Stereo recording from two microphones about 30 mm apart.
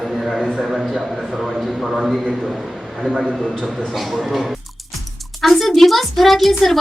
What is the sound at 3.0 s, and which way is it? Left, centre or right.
Speech, centre.